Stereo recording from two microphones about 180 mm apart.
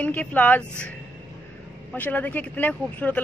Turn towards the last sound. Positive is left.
turn(degrees=10)  # may be behind; listen again after turning